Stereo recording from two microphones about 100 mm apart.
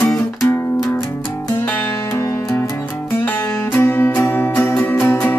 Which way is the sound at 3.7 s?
25° left (ahead or behind).